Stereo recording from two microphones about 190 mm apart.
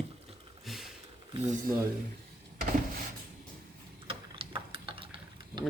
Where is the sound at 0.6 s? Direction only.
Centre (ahead or behind).